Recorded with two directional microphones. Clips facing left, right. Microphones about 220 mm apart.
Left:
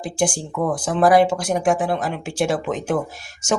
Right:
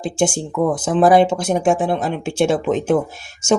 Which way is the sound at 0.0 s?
25° right (ahead or behind).